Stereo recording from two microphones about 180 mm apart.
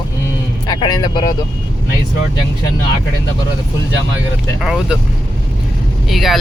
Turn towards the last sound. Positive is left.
turn(degrees=0)  # may be behind; listen again after turning